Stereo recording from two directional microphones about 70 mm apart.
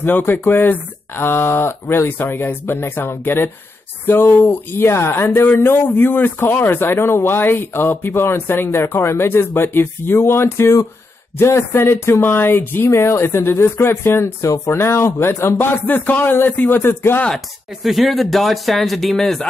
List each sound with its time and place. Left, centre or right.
0.0 s speech: left
17.8 s a man's voice: centre